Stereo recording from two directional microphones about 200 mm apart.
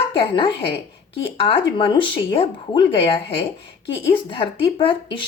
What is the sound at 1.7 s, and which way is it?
Speech, 25° left (ahead or behind).